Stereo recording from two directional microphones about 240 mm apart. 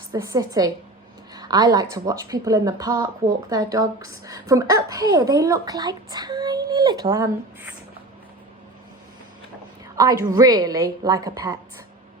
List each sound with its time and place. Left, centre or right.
0.1 s a woman's voice: centre
9.9 s a woman's voice: centre